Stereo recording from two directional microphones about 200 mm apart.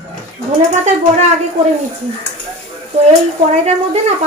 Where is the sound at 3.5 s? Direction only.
35° right (ahead or behind).